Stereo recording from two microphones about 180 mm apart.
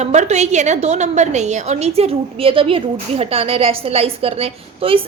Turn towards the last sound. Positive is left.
turn(degrees=-30)  # may be behind; listen again after turning